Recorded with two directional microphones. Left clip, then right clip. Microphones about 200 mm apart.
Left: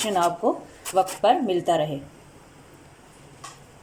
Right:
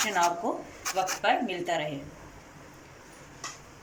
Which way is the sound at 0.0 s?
30° left (ahead or behind).